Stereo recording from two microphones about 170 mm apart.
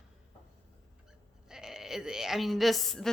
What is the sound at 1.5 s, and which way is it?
A woman's voice, 5° right (ahead or behind).